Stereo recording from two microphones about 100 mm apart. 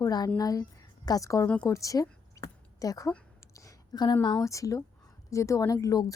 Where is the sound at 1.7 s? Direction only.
35° left (ahead or behind).